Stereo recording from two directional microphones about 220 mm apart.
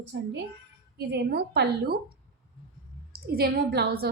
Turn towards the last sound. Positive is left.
turn(degrees=-45)  # may be behind; listen again after turning